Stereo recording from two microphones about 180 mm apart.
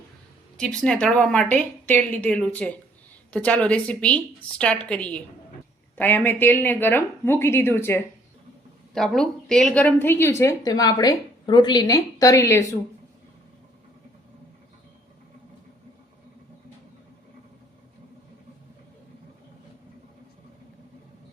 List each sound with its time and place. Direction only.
0.5 s a woman's voice: 5° left (ahead or behind)
9.0 s a woman's voice: 5° left (ahead or behind)